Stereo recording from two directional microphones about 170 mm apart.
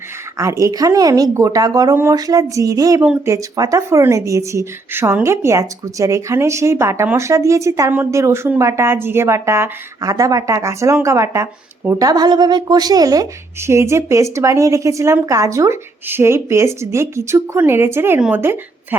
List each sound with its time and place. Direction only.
0.3 s a woman's voice: 20° right (ahead or behind)